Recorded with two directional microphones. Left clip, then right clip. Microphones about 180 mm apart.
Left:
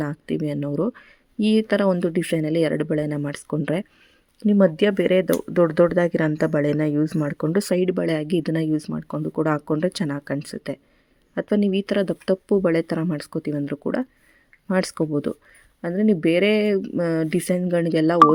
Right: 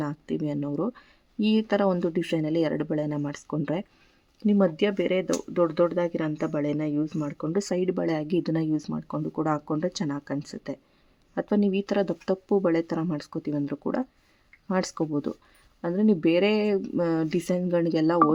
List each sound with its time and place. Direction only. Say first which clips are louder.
0.0 s speech: left 4 dB; 20° left (ahead or behind)